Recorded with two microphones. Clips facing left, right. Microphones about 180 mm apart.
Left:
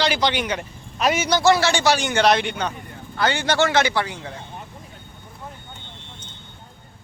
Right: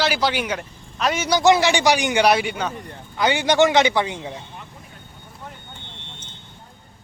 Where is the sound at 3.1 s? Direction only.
15° right (ahead or behind).